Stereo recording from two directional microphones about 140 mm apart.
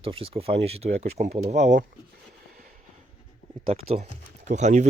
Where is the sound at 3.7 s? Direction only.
45° right (ahead or behind).